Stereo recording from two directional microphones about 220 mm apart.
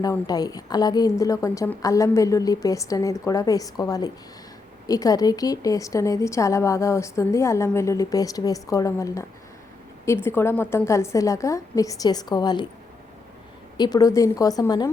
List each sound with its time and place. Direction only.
0.0 s a woman's voice: 15° left (ahead or behind)
10.2 s a woman's voice: 10° left (ahead or behind)
13.7 s a woman's voice: 20° left (ahead or behind)